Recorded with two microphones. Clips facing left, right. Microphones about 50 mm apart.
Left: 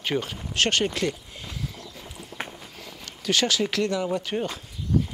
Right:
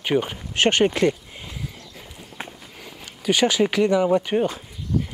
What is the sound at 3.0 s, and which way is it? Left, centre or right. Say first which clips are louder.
Speech: right 5 dB; centre.